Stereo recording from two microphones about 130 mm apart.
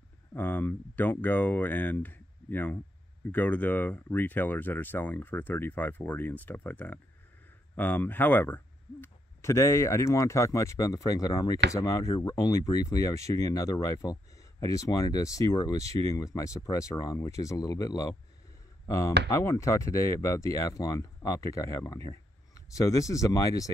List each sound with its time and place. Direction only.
0.3 s speech: 15° left (ahead or behind)